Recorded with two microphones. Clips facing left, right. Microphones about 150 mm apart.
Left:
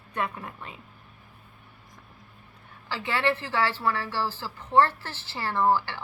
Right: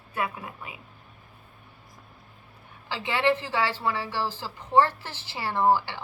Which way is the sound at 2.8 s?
20° right (ahead or behind).